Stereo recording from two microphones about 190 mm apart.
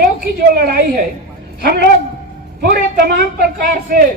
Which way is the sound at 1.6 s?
55° right (ahead or behind).